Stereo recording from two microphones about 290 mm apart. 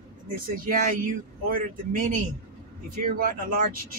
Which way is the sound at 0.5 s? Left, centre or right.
Right.